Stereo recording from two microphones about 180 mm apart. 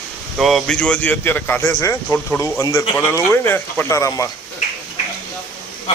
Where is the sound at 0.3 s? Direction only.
Centre (ahead or behind); by 4.3 s 15° left (ahead or behind).